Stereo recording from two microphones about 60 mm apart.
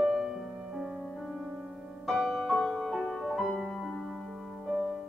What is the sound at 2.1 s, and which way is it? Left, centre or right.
Music, centre.